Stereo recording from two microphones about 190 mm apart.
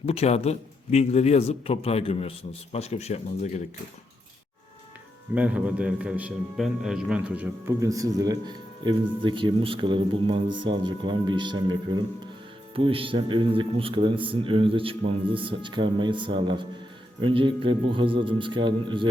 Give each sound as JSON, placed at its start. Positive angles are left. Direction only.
{"t": 0.0, "sound": "a man's voice", "side_deg": 30}
{"t": 5.3, "sound": "a man's voice", "side_deg": -5}